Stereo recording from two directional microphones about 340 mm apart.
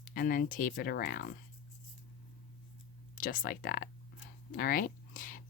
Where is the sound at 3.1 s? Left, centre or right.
Left.